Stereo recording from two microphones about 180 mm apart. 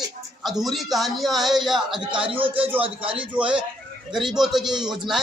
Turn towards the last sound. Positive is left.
turn(degrees=0)  # may be behind; listen again after turning